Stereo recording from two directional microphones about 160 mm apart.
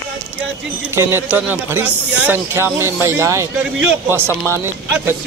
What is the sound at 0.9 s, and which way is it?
A man's voice, 15° right (ahead or behind).